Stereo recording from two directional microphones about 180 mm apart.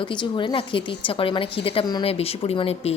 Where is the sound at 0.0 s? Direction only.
25° left (ahead or behind).